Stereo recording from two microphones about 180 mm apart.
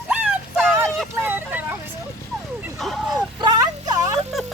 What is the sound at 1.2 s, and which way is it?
Vehicle, 10° right (ahead or behind).